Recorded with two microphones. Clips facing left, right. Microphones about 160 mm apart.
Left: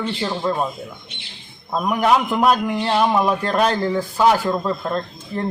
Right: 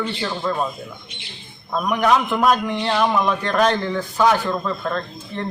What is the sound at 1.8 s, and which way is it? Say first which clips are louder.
Speech: left 1 dB; 10° left (ahead or behind).